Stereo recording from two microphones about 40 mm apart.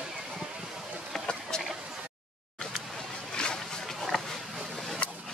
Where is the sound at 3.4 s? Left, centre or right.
Left.